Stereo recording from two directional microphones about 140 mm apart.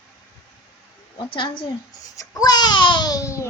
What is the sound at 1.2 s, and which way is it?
Speech, 35° left (ahead or behind).